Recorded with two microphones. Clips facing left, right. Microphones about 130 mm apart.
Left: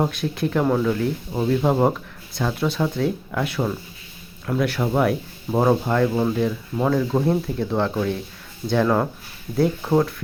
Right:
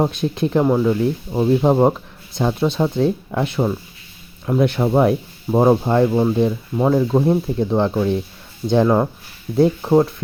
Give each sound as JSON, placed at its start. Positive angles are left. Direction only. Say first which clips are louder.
{"t": 0.0, "sound": "speech", "louder": "right 4 dB", "side_deg": -20}